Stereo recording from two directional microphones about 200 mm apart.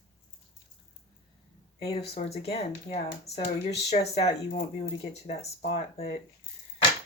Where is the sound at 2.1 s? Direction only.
30° left (ahead or behind).